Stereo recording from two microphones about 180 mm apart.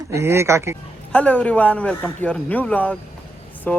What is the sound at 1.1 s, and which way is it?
Speech, 5° left (ahead or behind).